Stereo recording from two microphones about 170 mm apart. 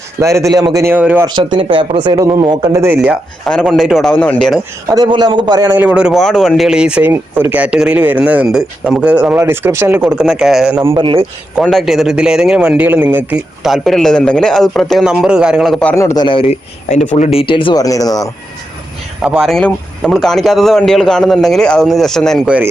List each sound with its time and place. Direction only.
0.2 s speech: 15° right (ahead or behind)
1.2 s speech: 25° right (ahead or behind)
2.8 s speech: 10° right (ahead or behind)
3.4 s a man's voice: 5° left (ahead or behind)
4.9 s speech: 25° right (ahead or behind)
5.7 s speech: 10° right (ahead or behind)
10.9 s a man's voice: 30° right (ahead or behind)
11.6 s a man's voice: centre (ahead or behind)
16.2 s speech: 30° left (ahead or behind)
19.2 s a man's voice: 5° right (ahead or behind)
22.4 s speech: 10° right (ahead or behind)